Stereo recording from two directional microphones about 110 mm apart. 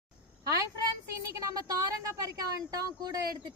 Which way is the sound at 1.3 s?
30° right (ahead or behind).